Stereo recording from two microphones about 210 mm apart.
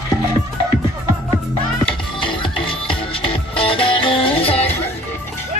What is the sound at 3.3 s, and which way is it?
Music, 25° left (ahead or behind).